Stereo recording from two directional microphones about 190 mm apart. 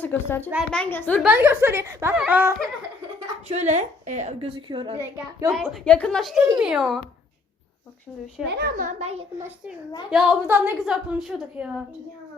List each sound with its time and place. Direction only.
0.0 s speech: 10° left (ahead or behind)
1.2 s speech: 10° right (ahead or behind)
3.5 s a woman's voice: 35° right (ahead or behind)
4.9 s speech: 15° right (ahead or behind)
5.5 s a woman's voice: centre (ahead or behind)
8.4 s a child's voice: 55° right (ahead or behind); by 9.2 s 35° right (ahead or behind)
10.1 s a woman's voice: 5° right (ahead or behind)